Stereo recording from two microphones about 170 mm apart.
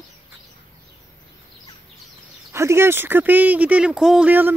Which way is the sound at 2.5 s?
15° right (ahead or behind).